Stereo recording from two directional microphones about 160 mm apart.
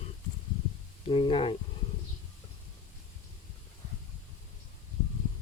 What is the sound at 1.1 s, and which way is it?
Speech, 30° left (ahead or behind).